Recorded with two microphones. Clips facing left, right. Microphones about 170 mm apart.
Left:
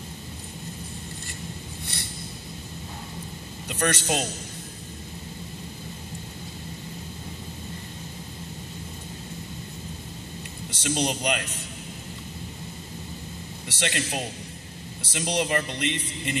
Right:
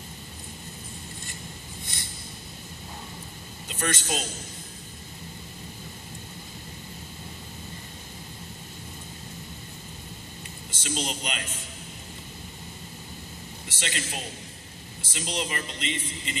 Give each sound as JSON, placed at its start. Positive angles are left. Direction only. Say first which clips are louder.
{"t": 3.6, "sound": "a man's voice", "louder": "left 5 dB", "side_deg": 70}
{"t": 10.7, "sound": "speech", "louder": "left 5 dB", "side_deg": 65}
{"t": 13.7, "sound": "speech", "louder": "left 6 dB", "side_deg": 65}